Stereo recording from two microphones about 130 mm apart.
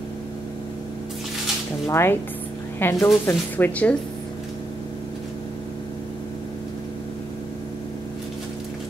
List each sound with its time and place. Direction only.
1.9 s speech: 20° left (ahead or behind)